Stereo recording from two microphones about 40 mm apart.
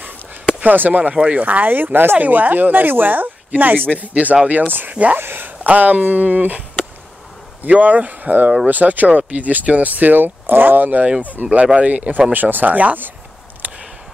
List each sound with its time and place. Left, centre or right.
0.7 s speech: right
1.1 s speech: right
1.4 s speech: right
2.1 s speech: right
5.2 s speech: right
7.7 s speech: right
11.5 s speech: right